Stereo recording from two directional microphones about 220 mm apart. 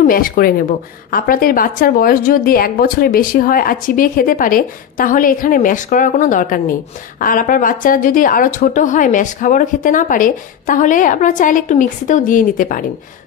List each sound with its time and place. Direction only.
0.0 s a woman's voice: 40° left (ahead or behind)